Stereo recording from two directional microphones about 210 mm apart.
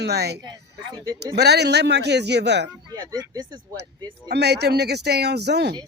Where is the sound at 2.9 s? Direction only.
20° right (ahead or behind).